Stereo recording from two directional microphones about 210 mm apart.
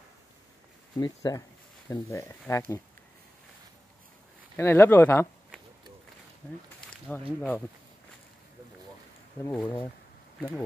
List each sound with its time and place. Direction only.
0.9 s speech: 20° left (ahead or behind)
4.6 s speech: 10° left (ahead or behind)
7.1 s speech: 5° left (ahead or behind)
9.4 s speech: 10° left (ahead or behind)